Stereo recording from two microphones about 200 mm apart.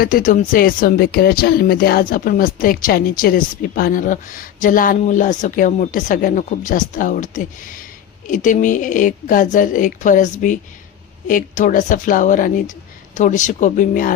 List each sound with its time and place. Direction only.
0.0 s a woman's voice: 45° left (ahead or behind)